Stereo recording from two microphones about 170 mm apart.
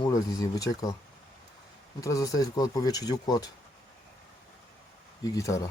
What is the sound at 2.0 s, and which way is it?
Speech, 20° left (ahead or behind).